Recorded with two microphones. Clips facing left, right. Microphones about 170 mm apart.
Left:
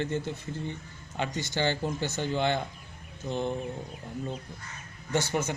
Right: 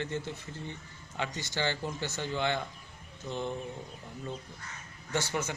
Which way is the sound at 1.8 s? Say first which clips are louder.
Left 5 dB; 20° left (ahead or behind).